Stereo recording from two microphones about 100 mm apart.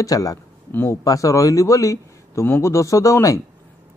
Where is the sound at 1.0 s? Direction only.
35° left (ahead or behind).